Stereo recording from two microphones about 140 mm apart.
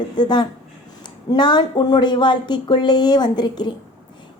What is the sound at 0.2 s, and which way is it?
Speech, 30° left (ahead or behind).